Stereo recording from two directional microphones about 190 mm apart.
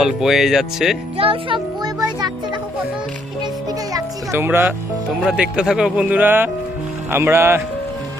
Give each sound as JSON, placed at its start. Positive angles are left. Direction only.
{"t": 0.0, "sound": "speech", "side_deg": 0}
{"t": 1.1, "sound": "a child's voice", "side_deg": -30}
{"t": 3.4, "sound": "music", "side_deg": -20}
{"t": 5.2, "sound": "speech", "side_deg": -5}